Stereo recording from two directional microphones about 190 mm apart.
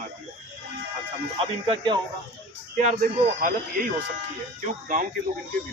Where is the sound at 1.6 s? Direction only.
25° right (ahead or behind).